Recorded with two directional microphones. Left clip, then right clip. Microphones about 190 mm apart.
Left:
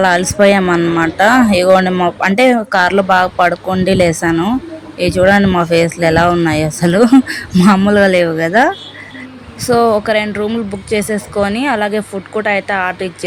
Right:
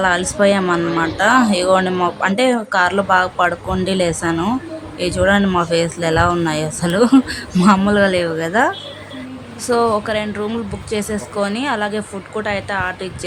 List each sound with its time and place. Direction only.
0.0 s a woman's voice: 20° left (ahead or behind)